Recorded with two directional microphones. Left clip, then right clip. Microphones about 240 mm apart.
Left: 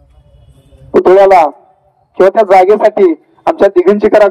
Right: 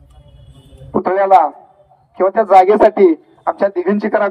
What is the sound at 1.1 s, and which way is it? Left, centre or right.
Speech, left.